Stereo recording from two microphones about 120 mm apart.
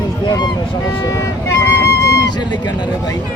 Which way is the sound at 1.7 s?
25° left (ahead or behind).